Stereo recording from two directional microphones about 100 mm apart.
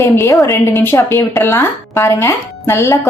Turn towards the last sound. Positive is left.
turn(degrees=25)  # may be behind; listen again after turning